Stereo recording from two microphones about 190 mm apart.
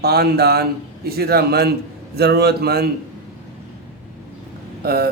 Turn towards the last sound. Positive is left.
turn(degrees=-55)  # may be behind; listen again after turning